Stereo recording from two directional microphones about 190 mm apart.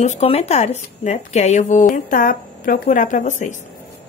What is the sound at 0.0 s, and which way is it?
A woman's voice, 35° left (ahead or behind).